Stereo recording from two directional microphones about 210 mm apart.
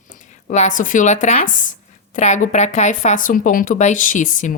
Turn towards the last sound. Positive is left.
turn(degrees=40)  # may be behind; listen again after turning